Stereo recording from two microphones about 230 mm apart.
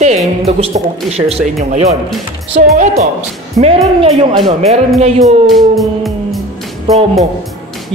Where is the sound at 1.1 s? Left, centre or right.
Right.